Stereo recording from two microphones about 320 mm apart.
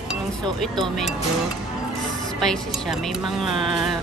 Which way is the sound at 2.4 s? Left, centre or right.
Centre.